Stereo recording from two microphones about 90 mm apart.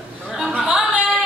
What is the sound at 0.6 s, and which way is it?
Music, 10° right (ahead or behind).